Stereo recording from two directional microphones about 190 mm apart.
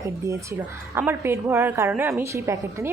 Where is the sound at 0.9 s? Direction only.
10° right (ahead or behind).